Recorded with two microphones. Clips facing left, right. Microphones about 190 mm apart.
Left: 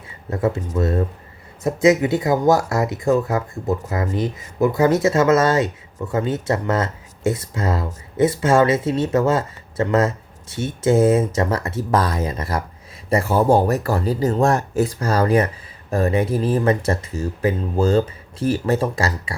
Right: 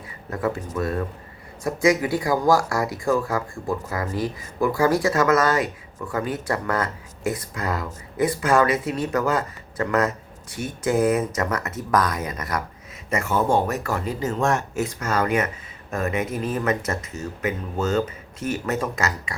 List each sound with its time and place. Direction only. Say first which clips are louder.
0.3 s speech: left 4 dB; 25° left (ahead or behind)